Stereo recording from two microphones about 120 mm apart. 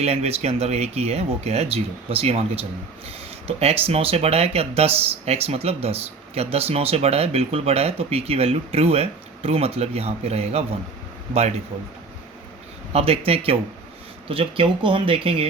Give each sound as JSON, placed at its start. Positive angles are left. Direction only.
{"t": 0.0, "sound": "speech", "side_deg": -60}
{"t": 12.9, "sound": "speech", "side_deg": -55}